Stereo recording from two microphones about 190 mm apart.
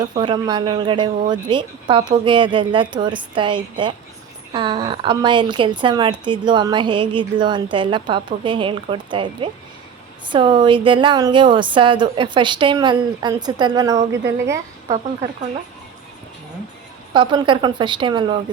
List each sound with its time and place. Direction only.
0.2 s a woman's voice: 25° right (ahead or behind)
17.2 s a woman's voice: 25° right (ahead or behind)